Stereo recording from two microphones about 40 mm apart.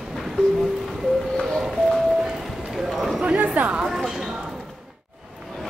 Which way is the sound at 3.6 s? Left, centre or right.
Right.